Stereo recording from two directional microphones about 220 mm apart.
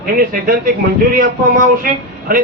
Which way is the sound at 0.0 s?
40° right (ahead or behind).